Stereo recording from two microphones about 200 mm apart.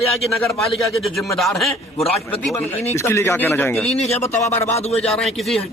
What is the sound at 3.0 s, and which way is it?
Speech, 15° left (ahead or behind).